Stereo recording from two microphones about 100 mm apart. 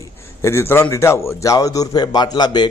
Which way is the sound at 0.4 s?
25° left (ahead or behind).